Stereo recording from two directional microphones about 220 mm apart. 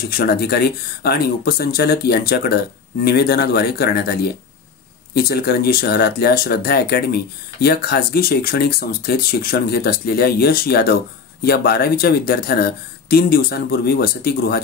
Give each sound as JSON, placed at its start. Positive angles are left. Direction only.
{"t": 0.1, "sound": "speech", "side_deg": 45}